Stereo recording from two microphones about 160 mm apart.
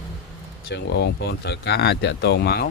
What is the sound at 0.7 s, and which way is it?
Speech, 90° left.